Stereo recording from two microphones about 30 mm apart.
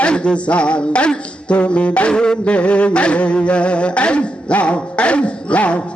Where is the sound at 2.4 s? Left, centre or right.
Left.